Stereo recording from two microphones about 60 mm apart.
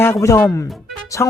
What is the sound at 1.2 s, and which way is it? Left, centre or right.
Speech, left.